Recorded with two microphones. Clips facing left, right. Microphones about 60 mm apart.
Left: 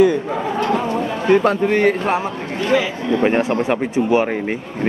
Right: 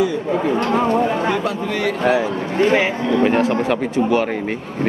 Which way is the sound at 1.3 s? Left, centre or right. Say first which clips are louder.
Left 7 dB; left.